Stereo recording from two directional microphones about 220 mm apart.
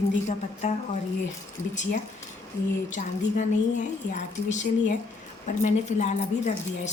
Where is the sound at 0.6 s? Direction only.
30° left (ahead or behind).